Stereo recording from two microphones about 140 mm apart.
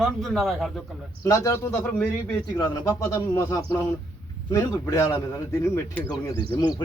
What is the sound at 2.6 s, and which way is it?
Speech, 25° left (ahead or behind).